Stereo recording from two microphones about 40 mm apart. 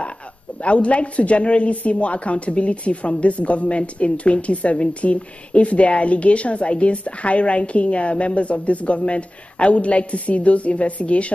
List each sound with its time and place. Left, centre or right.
0.6 s a woman's voice: left